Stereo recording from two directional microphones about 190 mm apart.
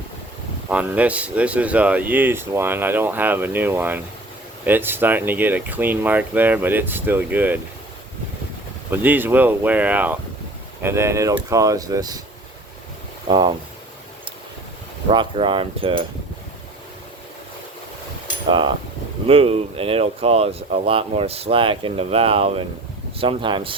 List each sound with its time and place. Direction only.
0.7 s speech: 5° right (ahead or behind)
8.9 s speech: 10° right (ahead or behind)
13.2 s speech: 25° right (ahead or behind)
15.1 s a sound: 25° right (ahead or behind)
19.3 s speech: 30° right (ahead or behind)
23.2 s a sound: 25° right (ahead or behind)